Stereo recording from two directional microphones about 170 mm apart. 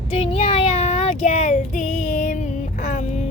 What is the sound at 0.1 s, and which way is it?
Child singing, 35° left (ahead or behind).